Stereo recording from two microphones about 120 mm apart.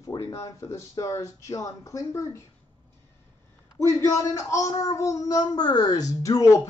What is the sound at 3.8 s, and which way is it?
Speech, 25° left (ahead or behind).